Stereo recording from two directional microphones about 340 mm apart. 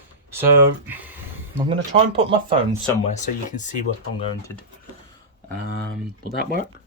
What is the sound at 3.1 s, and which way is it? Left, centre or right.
Speech, left.